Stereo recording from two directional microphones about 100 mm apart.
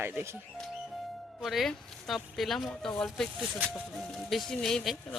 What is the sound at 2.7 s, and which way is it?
Speech, 10° left (ahead or behind).